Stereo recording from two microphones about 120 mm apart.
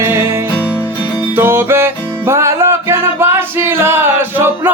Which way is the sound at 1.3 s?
20° right (ahead or behind).